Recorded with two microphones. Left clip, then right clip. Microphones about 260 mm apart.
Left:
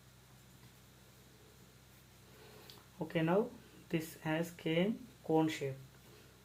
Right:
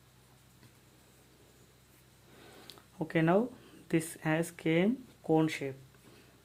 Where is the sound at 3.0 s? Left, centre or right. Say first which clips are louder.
Right 5 dB; right.